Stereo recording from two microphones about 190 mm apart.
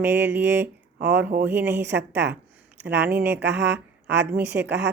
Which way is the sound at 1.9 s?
65° right (ahead or behind).